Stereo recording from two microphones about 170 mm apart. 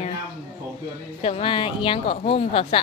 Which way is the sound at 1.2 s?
35° left (ahead or behind).